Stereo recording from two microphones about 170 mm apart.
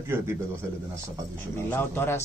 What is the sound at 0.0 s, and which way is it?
Speech, 15° right (ahead or behind).